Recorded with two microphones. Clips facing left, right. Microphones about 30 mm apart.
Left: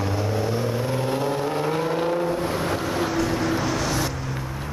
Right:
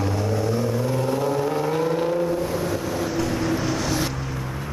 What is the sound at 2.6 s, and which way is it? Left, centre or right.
Vehicle, left.